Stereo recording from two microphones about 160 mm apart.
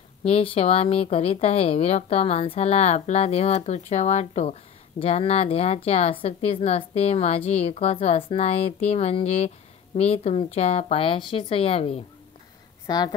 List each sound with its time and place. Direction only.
0.2 s speech: 40° left (ahead or behind)
12.8 s a woman's voice: 25° left (ahead or behind)